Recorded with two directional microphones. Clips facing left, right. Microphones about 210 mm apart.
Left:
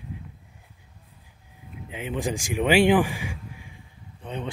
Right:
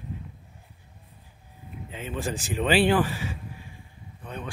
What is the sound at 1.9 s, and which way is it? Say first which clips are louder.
Speech: left 3 dB; 15° left (ahead or behind).